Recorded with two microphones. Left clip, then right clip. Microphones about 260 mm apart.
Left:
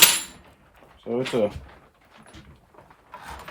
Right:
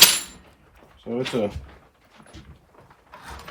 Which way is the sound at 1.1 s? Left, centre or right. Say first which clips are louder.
Left 2 dB; centre.